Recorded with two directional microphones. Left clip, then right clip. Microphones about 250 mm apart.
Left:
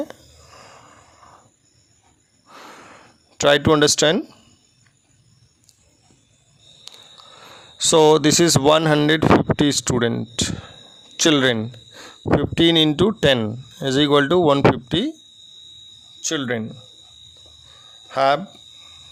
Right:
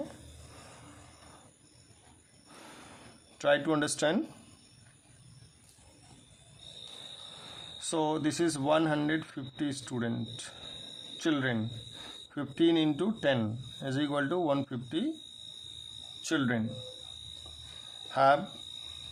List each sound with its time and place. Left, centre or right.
3.3 s speech: left
7.8 s speech: left
16.2 s speech: left
18.1 s speech: left